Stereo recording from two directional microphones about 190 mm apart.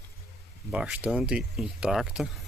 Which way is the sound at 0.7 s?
5° right (ahead or behind).